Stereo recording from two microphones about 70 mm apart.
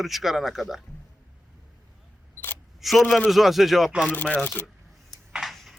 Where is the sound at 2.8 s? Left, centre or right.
Centre.